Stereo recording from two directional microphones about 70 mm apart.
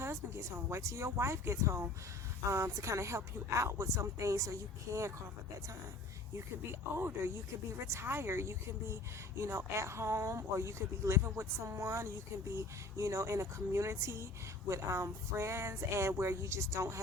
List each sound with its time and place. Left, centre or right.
0.0 s speech: right
6.3 s speech: right